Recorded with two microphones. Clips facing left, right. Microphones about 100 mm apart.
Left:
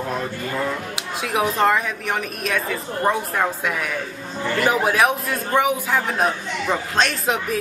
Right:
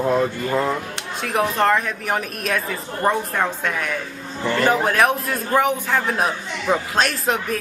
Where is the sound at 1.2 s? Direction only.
Centre (ahead or behind).